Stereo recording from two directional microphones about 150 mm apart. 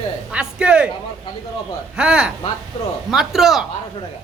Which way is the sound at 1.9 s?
5° right (ahead or behind).